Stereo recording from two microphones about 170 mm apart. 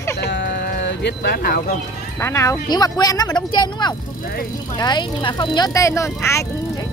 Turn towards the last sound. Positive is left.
turn(degrees=15)  # may be behind; listen again after turning